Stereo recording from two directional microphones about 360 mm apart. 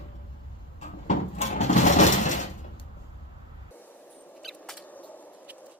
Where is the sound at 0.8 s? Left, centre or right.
Centre.